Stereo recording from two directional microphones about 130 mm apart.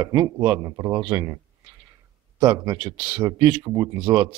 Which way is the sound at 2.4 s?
30° right (ahead or behind).